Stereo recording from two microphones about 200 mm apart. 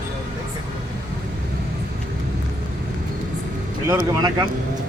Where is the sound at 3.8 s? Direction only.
20° right (ahead or behind).